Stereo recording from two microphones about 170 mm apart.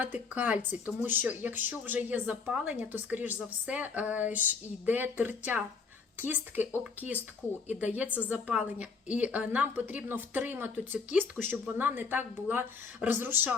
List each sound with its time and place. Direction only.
0.3 s a woman's voice: 10° right (ahead or behind)
7.7 s a woman's voice: 10° right (ahead or behind)